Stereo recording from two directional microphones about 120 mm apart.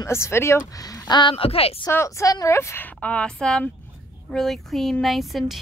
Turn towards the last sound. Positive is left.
turn(degrees=0)  # may be behind; listen again after turning